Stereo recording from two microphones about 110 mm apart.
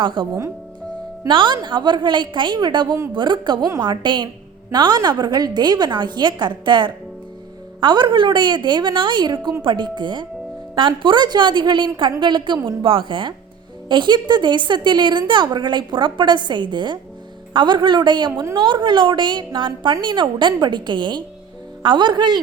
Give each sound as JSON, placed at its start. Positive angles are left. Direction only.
{"t": 0.0, "sound": "a woman's voice", "side_deg": -45}
{"t": 1.3, "sound": "a woman's voice", "side_deg": -45}